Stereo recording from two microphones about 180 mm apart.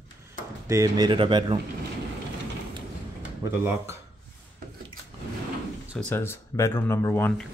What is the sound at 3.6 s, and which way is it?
Speech, 15° right (ahead or behind).